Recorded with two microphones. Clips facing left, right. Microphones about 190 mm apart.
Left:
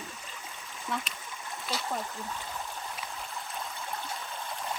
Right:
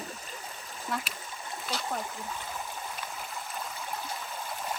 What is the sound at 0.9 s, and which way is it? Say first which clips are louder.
Speech: even; centre (ahead or behind).